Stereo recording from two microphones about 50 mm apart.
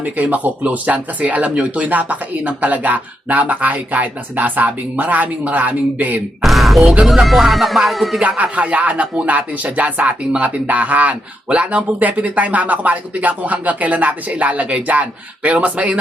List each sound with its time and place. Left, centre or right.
0.0 s speech: right
6.4 s music: centre
8.2 s speech: right